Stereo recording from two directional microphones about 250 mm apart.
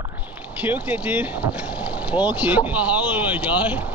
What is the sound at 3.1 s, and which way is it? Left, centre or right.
Speech, centre.